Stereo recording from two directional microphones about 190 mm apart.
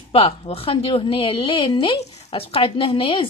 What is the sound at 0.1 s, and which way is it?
A woman's voice, 30° left (ahead or behind).